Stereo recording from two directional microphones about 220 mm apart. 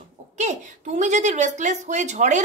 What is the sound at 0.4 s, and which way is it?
Speech, 35° right (ahead or behind).